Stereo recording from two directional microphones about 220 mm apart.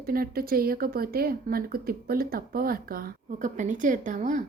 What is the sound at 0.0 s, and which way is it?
A woman's voice, 40° right (ahead or behind).